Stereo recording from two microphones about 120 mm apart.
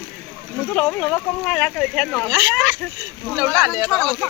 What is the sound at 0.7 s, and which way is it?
Speech, 5° left (ahead or behind).